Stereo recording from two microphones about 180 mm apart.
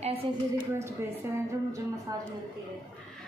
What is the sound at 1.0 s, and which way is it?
A woman's voice, 15° right (ahead or behind).